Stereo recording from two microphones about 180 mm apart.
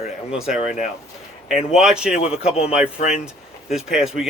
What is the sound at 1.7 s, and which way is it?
A man's voice, 5° right (ahead or behind).